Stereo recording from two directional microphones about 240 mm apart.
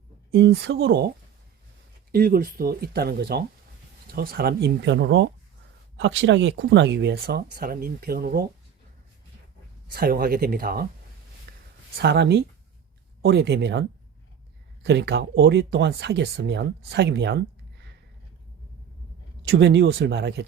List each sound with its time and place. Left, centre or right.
0.3 s speech: right
2.1 s speech: right
9.9 s speech: right
11.5 s a sound: right
12.0 s speech: right
14.8 s speech: right
19.5 s speech: right